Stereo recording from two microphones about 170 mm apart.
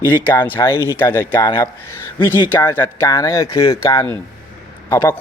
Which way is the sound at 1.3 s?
25° left (ahead or behind).